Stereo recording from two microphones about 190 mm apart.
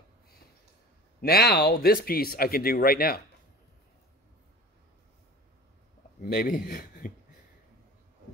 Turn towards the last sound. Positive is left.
turn(degrees=45)  # may be behind; listen again after turning